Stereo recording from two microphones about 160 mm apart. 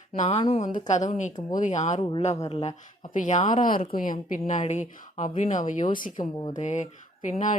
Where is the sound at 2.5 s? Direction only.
35° left (ahead or behind).